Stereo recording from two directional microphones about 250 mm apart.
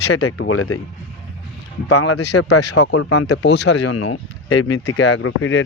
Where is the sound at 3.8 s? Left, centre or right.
Left.